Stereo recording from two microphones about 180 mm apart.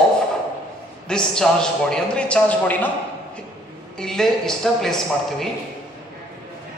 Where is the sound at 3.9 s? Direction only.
5° left (ahead or behind).